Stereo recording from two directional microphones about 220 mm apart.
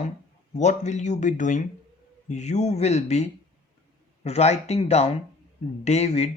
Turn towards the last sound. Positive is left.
turn(degrees=30)  # may be behind; listen again after turning